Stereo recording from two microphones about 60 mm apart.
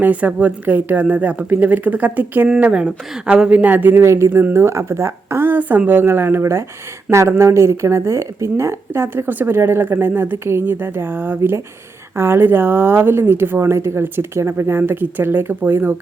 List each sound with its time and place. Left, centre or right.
0.0 s speech: right
2.6 s speech: centre
3.9 s speech: right
4.3 s speech: right
4.5 s a woman's voice: right
5.5 s speech: right
6.4 s a woman's voice: right